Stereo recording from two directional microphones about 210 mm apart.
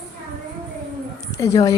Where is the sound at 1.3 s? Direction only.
15° left (ahead or behind).